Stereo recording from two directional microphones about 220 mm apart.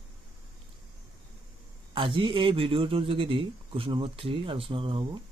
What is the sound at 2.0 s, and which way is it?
A man's voice, 25° right (ahead or behind).